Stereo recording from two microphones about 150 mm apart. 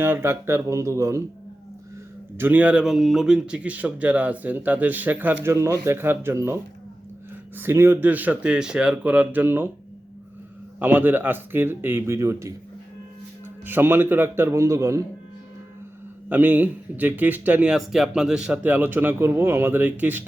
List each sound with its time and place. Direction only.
0.0 s speech: 15° right (ahead or behind)
2.4 s speech: 10° right (ahead or behind)
10.8 s speech: 10° right (ahead or behind)
13.7 s speech: 15° right (ahead or behind)
16.3 s speech: 10° right (ahead or behind)